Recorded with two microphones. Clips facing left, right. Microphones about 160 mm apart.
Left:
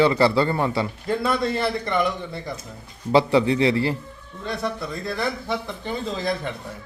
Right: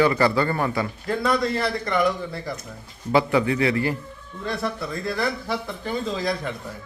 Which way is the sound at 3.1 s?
30° left (ahead or behind).